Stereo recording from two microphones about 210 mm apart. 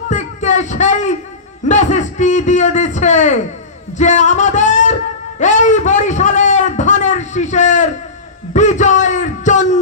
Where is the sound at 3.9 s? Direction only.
35° left (ahead or behind).